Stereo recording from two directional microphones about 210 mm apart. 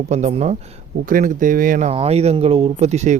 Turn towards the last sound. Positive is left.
turn(degrees=-30)  # may be behind; listen again after turning